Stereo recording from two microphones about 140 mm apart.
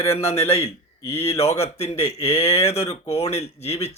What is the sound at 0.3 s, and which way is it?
A man's voice, 45° left (ahead or behind).